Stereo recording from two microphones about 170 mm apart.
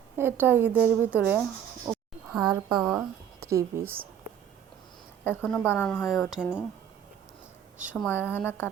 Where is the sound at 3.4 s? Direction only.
15° right (ahead or behind).